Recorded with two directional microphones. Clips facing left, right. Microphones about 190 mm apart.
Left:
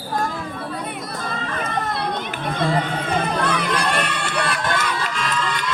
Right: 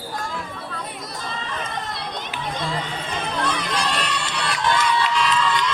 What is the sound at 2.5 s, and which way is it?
Crowd, 60° left (ahead or behind).